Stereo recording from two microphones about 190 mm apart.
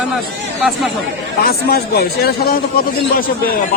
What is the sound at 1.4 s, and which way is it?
A man's voice, 55° left (ahead or behind).